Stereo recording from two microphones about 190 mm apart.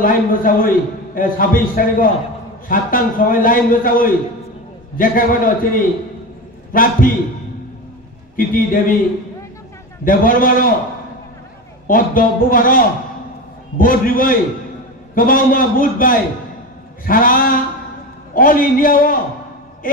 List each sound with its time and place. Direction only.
0.0 s a man's voice: 45° left (ahead or behind)
8.4 s a man's voice: 45° left (ahead or behind)
10.0 s a man's voice: 45° left (ahead or behind)
11.9 s a man's voice: 45° left (ahead or behind)